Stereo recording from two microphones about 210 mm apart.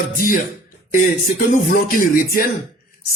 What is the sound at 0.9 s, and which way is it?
Speech, 40° left (ahead or behind).